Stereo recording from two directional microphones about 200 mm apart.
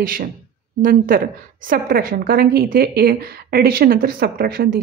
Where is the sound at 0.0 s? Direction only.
45° right (ahead or behind).